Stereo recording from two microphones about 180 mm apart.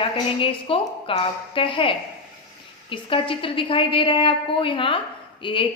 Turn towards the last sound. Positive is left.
turn(degrees=30)  # may be behind; listen again after turning